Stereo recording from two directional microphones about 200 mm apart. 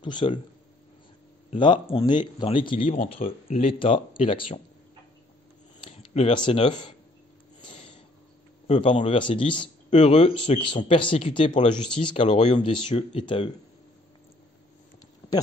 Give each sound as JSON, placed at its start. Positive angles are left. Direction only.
{"t": 0.0, "sound": "speech", "side_deg": 25}
{"t": 1.5, "sound": "speech", "side_deg": 25}
{"t": 5.8, "sound": "speech", "side_deg": 30}
{"t": 7.6, "sound": "snort", "side_deg": 30}
{"t": 8.6, "sound": "speech", "side_deg": 30}
{"t": 12.2, "sound": "speech", "side_deg": 35}
{"t": 12.7, "sound": "speech", "side_deg": 25}